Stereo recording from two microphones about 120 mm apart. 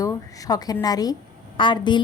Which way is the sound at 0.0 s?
30° left (ahead or behind).